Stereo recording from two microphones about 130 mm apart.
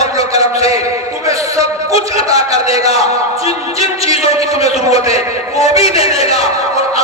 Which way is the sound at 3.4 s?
50° left (ahead or behind).